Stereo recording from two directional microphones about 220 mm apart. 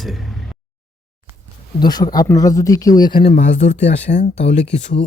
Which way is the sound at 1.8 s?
20° left (ahead or behind).